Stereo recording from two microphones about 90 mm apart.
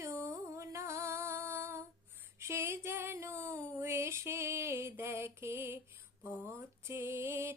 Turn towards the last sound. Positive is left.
turn(degrees=-30)  # may be behind; listen again after turning